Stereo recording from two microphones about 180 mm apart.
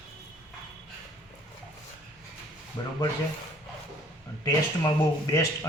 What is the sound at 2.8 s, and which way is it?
Speech, 25° left (ahead or behind).